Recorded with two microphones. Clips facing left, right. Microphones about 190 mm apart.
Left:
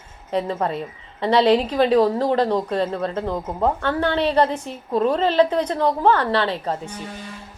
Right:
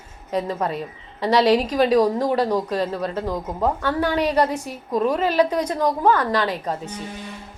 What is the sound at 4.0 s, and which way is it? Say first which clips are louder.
Speech: left 1 dB; 10° right (ahead or behind).